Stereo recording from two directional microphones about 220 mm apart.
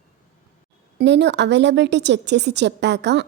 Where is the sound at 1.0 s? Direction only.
50° right (ahead or behind).